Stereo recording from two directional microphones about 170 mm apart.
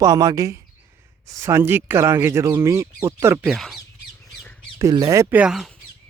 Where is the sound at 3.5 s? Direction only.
Centre (ahead or behind).